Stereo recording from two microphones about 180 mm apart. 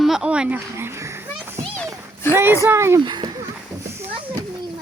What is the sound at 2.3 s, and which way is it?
Speech, 15° right (ahead or behind).